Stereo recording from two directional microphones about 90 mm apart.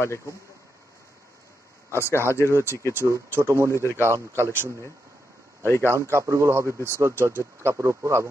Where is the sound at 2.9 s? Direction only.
30° right (ahead or behind).